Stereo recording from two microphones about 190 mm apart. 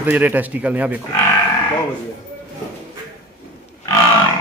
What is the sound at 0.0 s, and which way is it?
Speech, 10° right (ahead or behind).